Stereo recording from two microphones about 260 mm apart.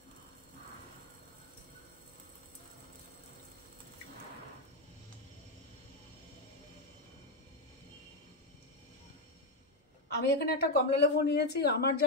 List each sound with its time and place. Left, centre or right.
10.0 s a woman's voice: left